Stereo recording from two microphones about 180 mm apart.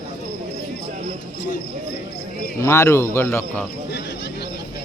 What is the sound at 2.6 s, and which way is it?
Speech, 15° left (ahead or behind).